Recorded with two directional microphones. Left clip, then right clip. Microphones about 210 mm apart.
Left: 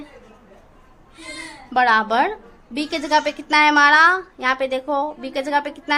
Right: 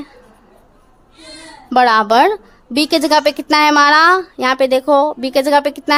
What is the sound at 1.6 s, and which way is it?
A woman's voice, 45° right (ahead or behind).